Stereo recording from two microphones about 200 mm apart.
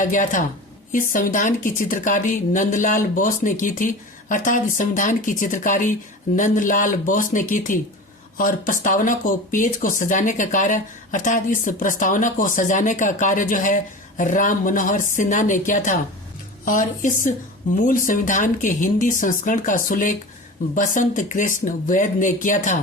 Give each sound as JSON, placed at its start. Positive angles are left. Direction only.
{"t": 0.0, "sound": "speech", "side_deg": 40}